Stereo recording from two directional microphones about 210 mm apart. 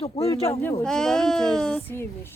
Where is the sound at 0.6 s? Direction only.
10° left (ahead or behind).